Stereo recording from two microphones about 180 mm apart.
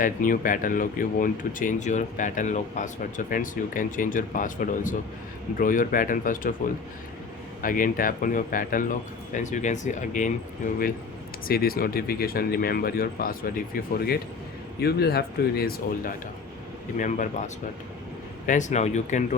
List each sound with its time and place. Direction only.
0.0 s speech: 50° left (ahead or behind)
7.6 s speech: 50° left (ahead or behind)
11.4 s speech: 55° left (ahead or behind)
17.0 s speech: 45° left (ahead or behind)